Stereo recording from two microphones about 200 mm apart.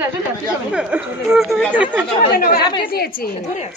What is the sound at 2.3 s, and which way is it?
Speech, 45° left (ahead or behind).